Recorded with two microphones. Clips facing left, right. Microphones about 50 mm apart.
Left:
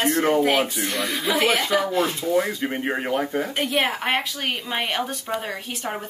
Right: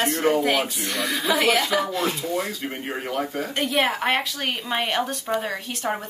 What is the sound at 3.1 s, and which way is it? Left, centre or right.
Speech, left.